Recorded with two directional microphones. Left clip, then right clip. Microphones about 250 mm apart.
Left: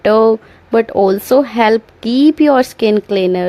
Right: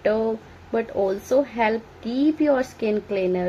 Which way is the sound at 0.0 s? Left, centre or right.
Left.